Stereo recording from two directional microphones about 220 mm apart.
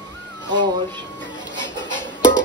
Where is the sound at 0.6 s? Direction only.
20° right (ahead or behind).